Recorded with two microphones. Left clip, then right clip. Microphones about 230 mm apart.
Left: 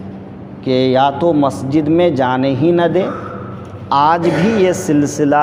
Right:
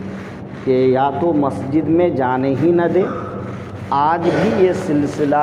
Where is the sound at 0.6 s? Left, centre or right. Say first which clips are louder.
Left 2 dB; left.